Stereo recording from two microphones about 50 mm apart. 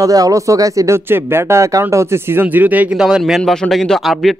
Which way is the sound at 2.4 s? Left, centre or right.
Right.